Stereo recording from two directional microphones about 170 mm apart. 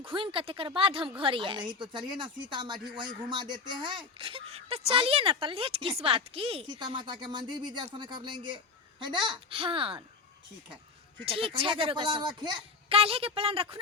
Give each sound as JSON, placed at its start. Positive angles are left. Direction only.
{"t": 0.0, "sound": "a woman's voice", "side_deg": -30}
{"t": 11.3, "sound": "a woman's voice", "side_deg": -35}